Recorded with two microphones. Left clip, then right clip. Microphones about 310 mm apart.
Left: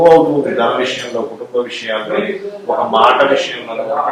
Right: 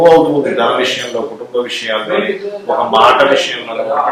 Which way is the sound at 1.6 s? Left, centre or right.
Centre.